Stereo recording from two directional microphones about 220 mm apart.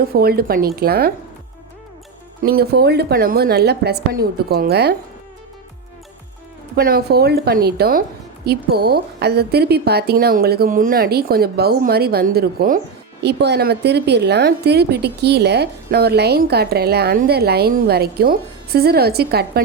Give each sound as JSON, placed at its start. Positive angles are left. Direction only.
{"t": 0.1, "sound": "a woman's voice", "side_deg": -45}
{"t": 2.4, "sound": "a woman's voice", "side_deg": -45}
{"t": 6.7, "sound": "a woman's voice", "side_deg": -45}